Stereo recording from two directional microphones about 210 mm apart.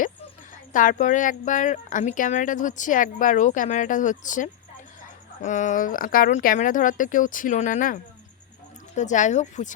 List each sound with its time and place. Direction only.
0.7 s speech: 40° left (ahead or behind)